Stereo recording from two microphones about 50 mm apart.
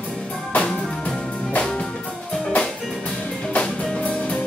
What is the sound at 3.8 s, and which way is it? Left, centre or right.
Music, left.